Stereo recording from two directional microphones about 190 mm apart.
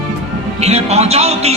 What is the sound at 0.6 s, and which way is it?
Speech, 35° right (ahead or behind).